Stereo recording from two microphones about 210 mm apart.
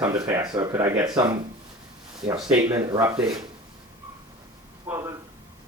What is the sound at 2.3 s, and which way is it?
Speech, 5° right (ahead or behind).